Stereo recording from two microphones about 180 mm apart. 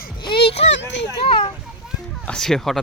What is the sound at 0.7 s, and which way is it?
Speech, 80° left.